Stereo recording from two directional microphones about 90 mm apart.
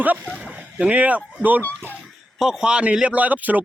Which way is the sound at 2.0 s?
Centre (ahead or behind).